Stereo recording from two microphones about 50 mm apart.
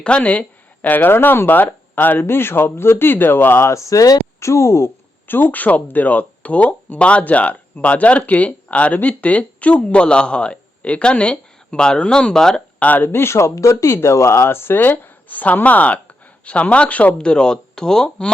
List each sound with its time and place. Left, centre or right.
0.2 s speech: left
2.2 s speech: left
3.7 s speech: left
5.3 s speech: left; by 12.6 s centre
12.8 s speech: left
13.1 s speech: left
14.8 s speech: left
17.2 s speech: centre